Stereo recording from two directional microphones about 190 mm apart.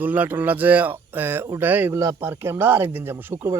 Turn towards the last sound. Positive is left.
turn(degrees=-10)  # may be behind; listen again after turning